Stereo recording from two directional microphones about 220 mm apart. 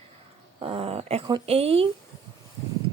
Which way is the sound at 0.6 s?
25° right (ahead or behind).